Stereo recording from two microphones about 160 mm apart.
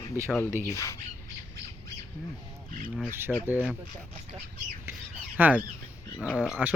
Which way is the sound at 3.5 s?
10° right (ahead or behind).